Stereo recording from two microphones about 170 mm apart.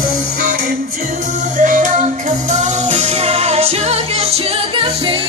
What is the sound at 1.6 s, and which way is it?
Music, 45° right (ahead or behind).